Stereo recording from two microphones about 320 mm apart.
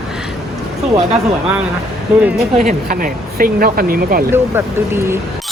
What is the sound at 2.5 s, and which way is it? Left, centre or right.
Speech, right.